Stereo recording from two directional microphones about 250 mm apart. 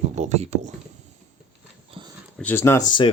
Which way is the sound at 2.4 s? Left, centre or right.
Centre.